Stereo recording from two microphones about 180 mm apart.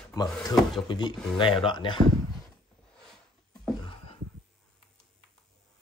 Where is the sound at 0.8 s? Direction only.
25° left (ahead or behind).